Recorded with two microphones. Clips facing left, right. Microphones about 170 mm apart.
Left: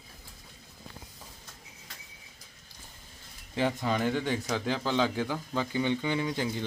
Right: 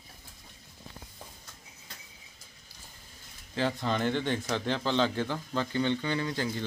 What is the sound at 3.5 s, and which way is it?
Speech, 10° left (ahead or behind).